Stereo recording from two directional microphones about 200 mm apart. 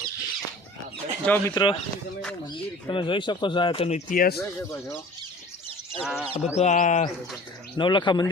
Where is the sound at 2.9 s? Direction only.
25° left (ahead or behind); by 4.3 s 45° left (ahead or behind).